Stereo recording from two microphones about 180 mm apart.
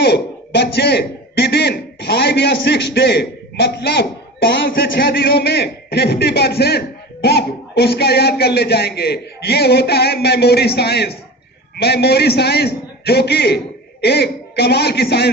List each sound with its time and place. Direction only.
0.0 s a man's voice: 65° left (ahead or behind)